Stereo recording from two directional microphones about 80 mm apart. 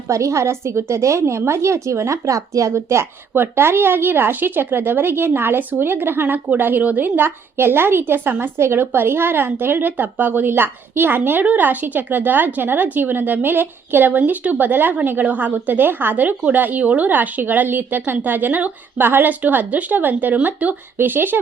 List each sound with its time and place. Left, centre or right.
0.1 s a woman's voice: right